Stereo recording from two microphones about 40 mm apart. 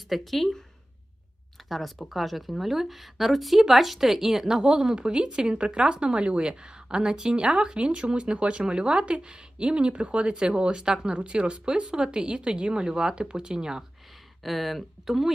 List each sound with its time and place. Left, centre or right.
0.1 s speech: centre
2.0 s speech: centre
14.4 s speech: centre